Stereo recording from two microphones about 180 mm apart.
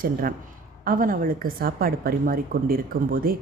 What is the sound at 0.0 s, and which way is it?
A woman's voice, 50° right (ahead or behind).